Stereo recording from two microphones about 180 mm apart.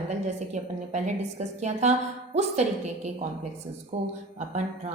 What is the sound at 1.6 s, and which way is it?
Speech, 40° right (ahead or behind).